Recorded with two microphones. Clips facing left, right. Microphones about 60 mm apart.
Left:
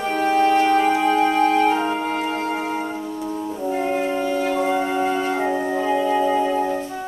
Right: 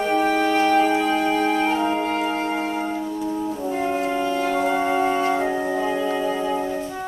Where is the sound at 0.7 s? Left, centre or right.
Centre.